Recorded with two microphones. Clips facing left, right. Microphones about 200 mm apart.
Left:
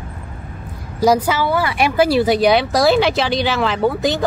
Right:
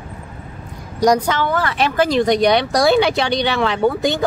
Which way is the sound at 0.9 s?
5° left (ahead or behind).